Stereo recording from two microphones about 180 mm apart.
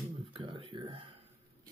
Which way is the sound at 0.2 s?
25° right (ahead or behind).